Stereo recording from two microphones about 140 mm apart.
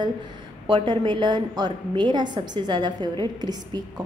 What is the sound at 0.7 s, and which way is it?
A woman's voice, 35° right (ahead or behind).